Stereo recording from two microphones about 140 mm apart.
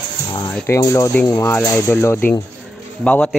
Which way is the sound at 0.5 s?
20° left (ahead or behind).